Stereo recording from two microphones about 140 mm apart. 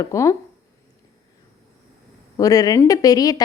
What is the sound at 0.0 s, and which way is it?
Speech, 20° left (ahead or behind).